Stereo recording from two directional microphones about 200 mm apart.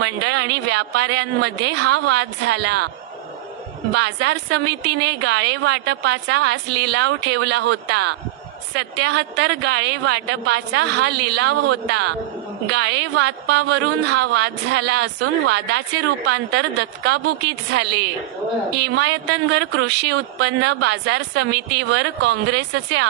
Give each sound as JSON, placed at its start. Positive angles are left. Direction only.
{"t": 0.0, "sound": "a woman's voice", "side_deg": -55}
{"t": 3.9, "sound": "a woman's voice", "side_deg": -55}